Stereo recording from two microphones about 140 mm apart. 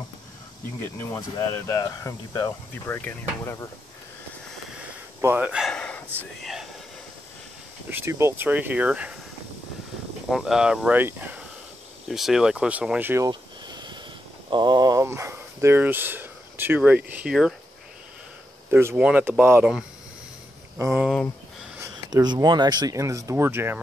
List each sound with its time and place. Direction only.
1.0 s speech: 20° left (ahead or behind)
5.2 s speech: 15° right (ahead or behind)
5.7 s a sound: 5° left (ahead or behind)
6.4 s whispering: centre (ahead or behind)
7.9 s speech: 20° right (ahead or behind)
10.3 s speech: 5° right (ahead or behind)
13.3 s a sound: 30° right (ahead or behind)
14.5 s speech: 30° right (ahead or behind); by 17.6 s 5° right (ahead or behind)
18.7 s speech: 15° right (ahead or behind)
20.7 s speech: 15° right (ahead or behind)
21.7 s speech: 30° right (ahead or behind)